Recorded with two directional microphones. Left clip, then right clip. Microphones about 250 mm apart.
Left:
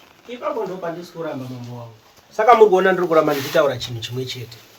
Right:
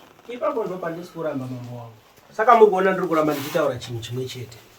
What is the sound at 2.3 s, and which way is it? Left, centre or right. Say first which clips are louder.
Speech: left 2 dB; left.